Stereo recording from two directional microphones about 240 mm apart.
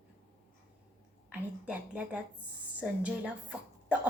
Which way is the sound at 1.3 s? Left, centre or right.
Centre.